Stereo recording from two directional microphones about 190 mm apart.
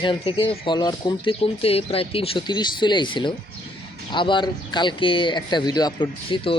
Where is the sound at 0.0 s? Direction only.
25° left (ahead or behind).